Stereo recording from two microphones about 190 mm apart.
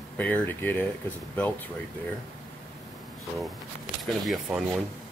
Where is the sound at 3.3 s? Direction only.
Centre (ahead or behind).